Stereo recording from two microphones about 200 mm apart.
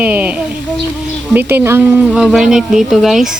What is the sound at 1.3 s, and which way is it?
Speech, 10° right (ahead or behind).